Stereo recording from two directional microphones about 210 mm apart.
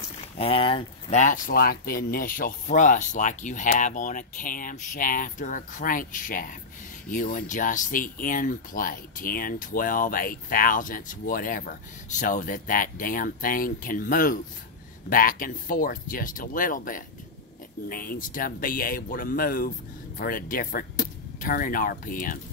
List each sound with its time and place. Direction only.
0.4 s speech: 25° left (ahead or behind)